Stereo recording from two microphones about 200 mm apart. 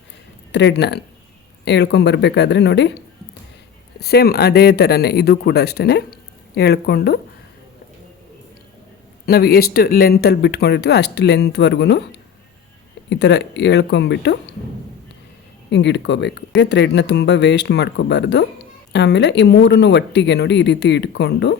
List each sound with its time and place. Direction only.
0.5 s speech: 60° left (ahead or behind)
4.0 s speech: 50° left (ahead or behind)
9.2 s speech: 50° left (ahead or behind)
13.1 s speech: 60° left (ahead or behind)
15.7 s speech: 60° left (ahead or behind)